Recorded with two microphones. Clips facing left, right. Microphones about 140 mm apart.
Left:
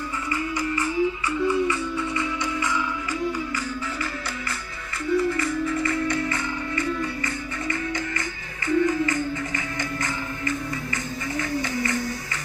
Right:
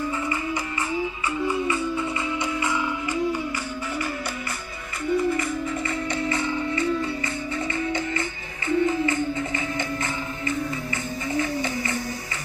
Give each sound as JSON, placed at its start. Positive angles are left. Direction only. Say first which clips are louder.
{"t": 1.5, "sound": "music", "louder": "left 1 dB", "side_deg": -20}
{"t": 5.1, "sound": "music", "louder": "left 1 dB", "side_deg": -20}
{"t": 10.9, "sound": "music", "louder": "right 3 dB", "side_deg": -20}